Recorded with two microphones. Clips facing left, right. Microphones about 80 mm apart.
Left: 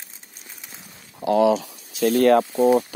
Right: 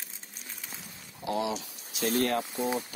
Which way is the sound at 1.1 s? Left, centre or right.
Left.